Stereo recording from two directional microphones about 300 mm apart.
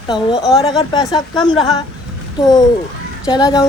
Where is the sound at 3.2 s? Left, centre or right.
Centre.